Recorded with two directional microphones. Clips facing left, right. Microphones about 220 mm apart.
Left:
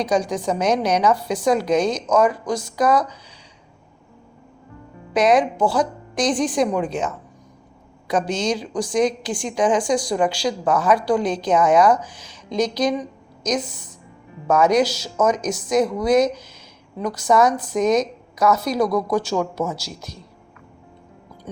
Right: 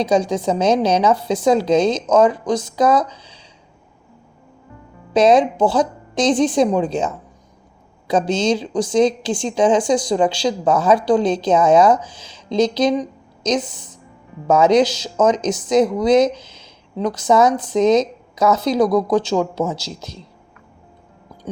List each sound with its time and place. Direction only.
0.0 s speech: 25° right (ahead or behind)
5.1 s speech: 25° right (ahead or behind)